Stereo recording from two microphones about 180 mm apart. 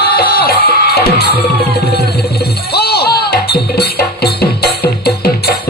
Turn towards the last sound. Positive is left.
turn(degrees=60)  # may be behind; listen again after turning